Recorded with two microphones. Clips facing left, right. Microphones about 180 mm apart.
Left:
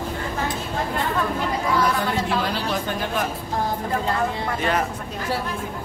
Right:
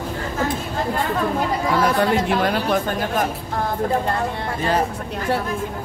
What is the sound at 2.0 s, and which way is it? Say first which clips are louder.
Speech: right 5 dB; 55° right (ahead or behind).